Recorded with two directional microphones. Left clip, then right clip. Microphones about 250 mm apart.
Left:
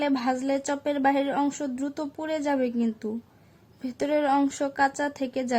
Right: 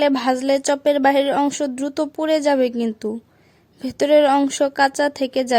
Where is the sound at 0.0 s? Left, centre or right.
Right.